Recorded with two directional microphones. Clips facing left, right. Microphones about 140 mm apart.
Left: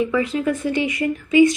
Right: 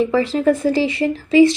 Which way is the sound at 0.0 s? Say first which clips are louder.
Right 4 dB; 30° right (ahead or behind).